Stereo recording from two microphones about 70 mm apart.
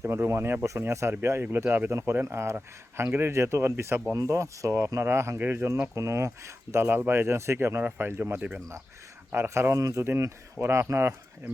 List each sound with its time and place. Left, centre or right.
0.0 s speech: right
4.1 s speech: right
5.4 s speech: right
5.9 s speech: right
9.3 s speech: right
9.7 s speech: right